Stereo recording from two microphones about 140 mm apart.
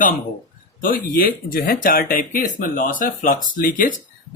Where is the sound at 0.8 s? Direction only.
90° left.